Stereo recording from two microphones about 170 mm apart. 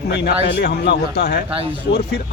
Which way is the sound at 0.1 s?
80° left.